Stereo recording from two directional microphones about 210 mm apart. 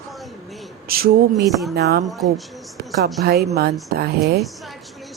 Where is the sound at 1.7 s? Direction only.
50° right (ahead or behind).